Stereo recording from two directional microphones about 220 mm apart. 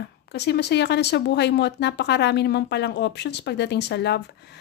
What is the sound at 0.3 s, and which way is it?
Speech, 50° left (ahead or behind).